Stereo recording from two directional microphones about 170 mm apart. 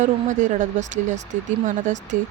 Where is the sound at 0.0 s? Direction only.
45° right (ahead or behind).